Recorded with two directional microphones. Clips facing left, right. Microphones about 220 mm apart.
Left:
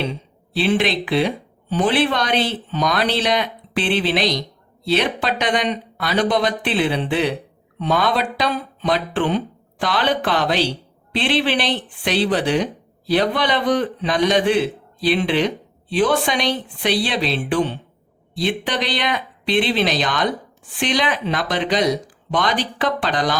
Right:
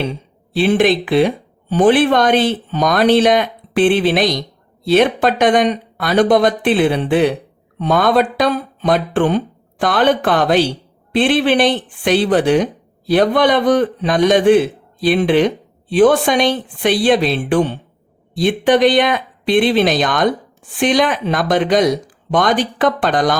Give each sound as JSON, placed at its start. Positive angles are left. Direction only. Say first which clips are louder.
{"t": 0.5, "sound": "a man's voice", "louder": "right 6 dB", "side_deg": -50}